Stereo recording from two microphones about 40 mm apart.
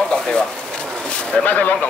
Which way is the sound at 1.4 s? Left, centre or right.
Left.